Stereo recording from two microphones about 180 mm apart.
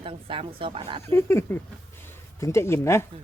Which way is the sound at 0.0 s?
30° right (ahead or behind).